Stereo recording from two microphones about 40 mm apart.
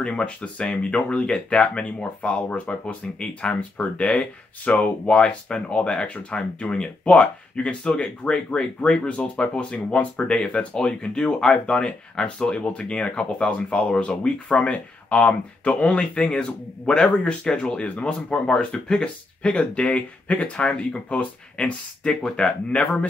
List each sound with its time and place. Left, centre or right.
0.0 s speech: left
3.2 s speech: left
4.2 s speech: left
22.2 s speech: left